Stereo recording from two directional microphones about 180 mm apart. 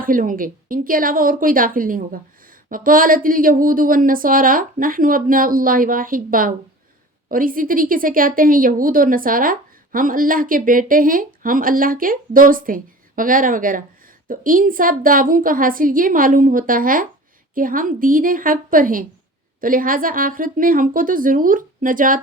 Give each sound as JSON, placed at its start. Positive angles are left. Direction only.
{"t": 0.0, "sound": "a woman's voice", "side_deg": -50}